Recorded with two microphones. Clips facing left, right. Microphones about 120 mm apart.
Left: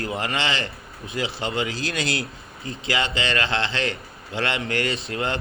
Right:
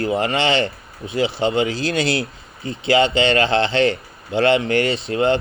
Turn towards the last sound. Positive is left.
turn(degrees=-25)  # may be behind; listen again after turning